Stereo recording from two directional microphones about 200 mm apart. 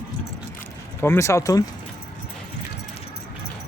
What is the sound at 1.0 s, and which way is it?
Speech, 15° left (ahead or behind).